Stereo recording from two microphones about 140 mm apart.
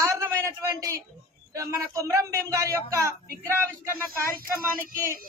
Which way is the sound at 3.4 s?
15° right (ahead or behind).